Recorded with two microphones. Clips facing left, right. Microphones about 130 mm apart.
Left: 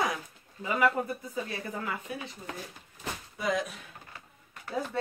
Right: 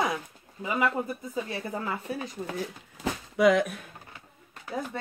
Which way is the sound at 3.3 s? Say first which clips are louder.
Right 10 dB; 75° right (ahead or behind).